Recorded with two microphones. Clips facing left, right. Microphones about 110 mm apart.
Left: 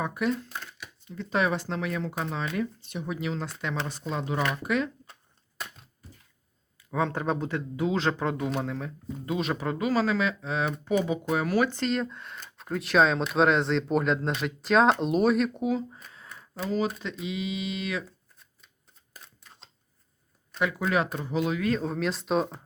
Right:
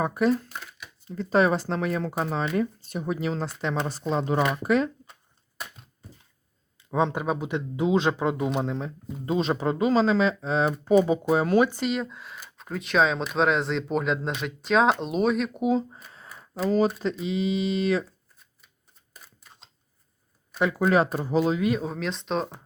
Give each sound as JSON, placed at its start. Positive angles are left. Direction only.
{"t": 0.0, "sound": "speech", "side_deg": -35}
{"t": 0.4, "sound": "a sound", "side_deg": -5}
{"t": 1.0, "sound": "speech", "side_deg": -40}
{"t": 6.9, "sound": "speech", "side_deg": -15}
{"t": 7.5, "sound": "speech", "side_deg": -20}
{"t": 11.7, "sound": "speech", "side_deg": -10}
{"t": 15.6, "sound": "speech", "side_deg": -25}
{"t": 16.6, "sound": "speech", "side_deg": -40}
{"t": 19.2, "sound": "camera", "side_deg": -5}
{"t": 20.6, "sound": "speech", "side_deg": -35}
{"t": 21.6, "sound": "speech", "side_deg": -10}